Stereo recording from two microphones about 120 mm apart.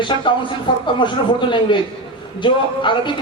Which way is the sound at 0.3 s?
40° left (ahead or behind).